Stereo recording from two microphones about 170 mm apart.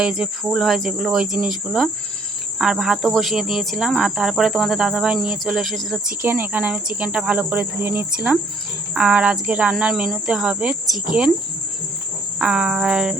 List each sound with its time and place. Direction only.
0.0 s speech: 5° right (ahead or behind)
6.2 s cricket: 10° right (ahead or behind)
8.9 s speech: 5° right (ahead or behind)
12.4 s speech: 5° right (ahead or behind)